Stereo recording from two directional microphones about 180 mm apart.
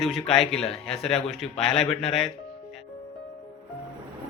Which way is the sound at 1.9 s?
35° left (ahead or behind).